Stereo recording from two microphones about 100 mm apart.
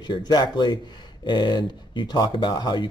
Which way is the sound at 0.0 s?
45° left (ahead or behind).